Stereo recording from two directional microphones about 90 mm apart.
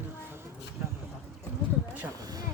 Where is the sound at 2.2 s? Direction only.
45° right (ahead or behind).